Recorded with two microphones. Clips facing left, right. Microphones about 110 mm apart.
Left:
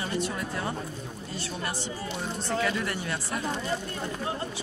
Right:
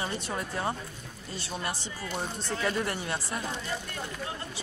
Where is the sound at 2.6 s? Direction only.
35° right (ahead or behind).